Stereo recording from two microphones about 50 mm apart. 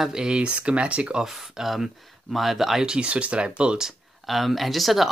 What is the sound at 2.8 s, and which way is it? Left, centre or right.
Speech, centre.